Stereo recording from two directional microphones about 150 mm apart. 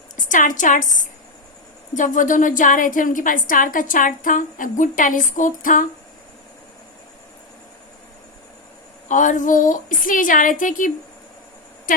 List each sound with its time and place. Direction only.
0.3 s a woman's voice: 60° left (ahead or behind)
9.0 s a woman's voice: 60° left (ahead or behind)